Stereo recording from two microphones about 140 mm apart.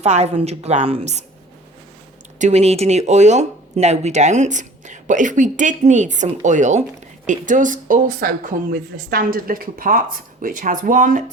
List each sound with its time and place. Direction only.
0.0 s a woman's voice: 50° right (ahead or behind)
2.4 s speech: 50° right (ahead or behind); by 11.2 s 70° right (ahead or behind)